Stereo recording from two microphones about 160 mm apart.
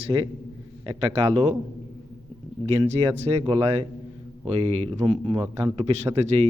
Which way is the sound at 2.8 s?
45° right (ahead or behind).